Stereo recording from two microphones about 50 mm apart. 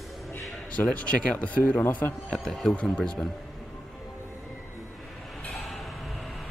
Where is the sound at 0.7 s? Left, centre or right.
Left.